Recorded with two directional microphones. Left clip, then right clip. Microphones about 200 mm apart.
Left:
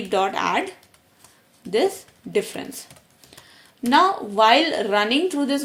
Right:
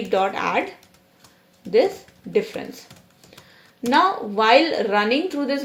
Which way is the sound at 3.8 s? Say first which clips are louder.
Left 1 dB; 35° left (ahead or behind).